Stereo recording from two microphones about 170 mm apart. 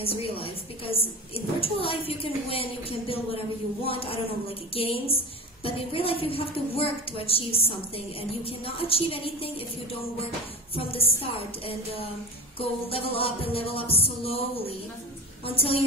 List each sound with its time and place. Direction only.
0.0 s a woman's voice: 35° left (ahead or behind)
10.8 s a woman's voice: 35° left (ahead or behind)
12.5 s a woman's voice: 35° left (ahead or behind)
15.4 s a woman's voice: 35° left (ahead or behind)